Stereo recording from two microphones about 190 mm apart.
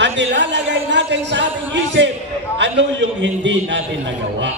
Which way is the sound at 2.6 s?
70° right (ahead or behind).